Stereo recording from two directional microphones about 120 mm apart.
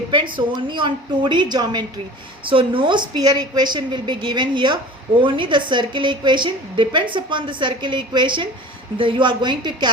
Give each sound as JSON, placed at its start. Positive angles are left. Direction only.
{"t": 0.1, "sound": "a woman's voice", "side_deg": -40}